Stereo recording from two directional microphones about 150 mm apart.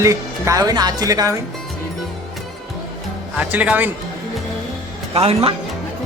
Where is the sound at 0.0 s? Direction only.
20° right (ahead or behind).